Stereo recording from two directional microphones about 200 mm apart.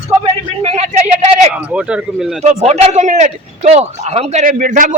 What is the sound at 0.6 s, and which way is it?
Speech, 35° right (ahead or behind).